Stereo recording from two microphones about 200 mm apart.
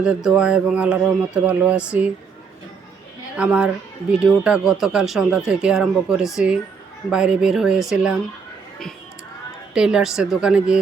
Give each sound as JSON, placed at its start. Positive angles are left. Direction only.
{"t": 0.0, "sound": "speech", "side_deg": -5}
{"t": 3.3, "sound": "speech", "side_deg": -5}
{"t": 9.7, "sound": "speech", "side_deg": -5}